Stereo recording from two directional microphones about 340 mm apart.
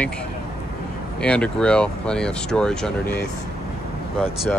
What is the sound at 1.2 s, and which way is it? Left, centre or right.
Speech, centre.